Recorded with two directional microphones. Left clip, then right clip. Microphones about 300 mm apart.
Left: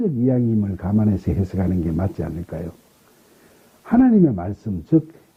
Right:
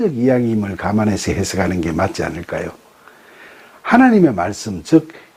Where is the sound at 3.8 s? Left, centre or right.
Centre.